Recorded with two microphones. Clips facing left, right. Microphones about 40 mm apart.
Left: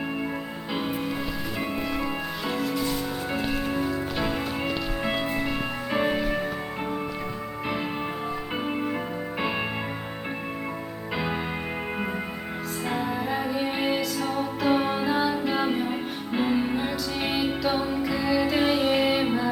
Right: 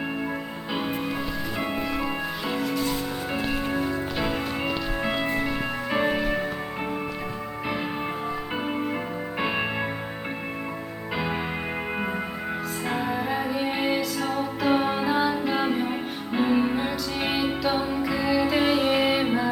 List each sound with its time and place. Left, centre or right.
2.5 s music: centre
8.6 s music: centre
12.9 s music: centre